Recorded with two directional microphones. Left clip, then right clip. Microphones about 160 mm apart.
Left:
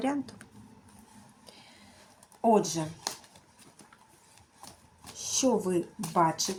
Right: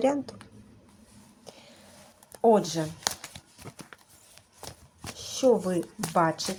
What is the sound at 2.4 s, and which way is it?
Speech, 35° right (ahead or behind).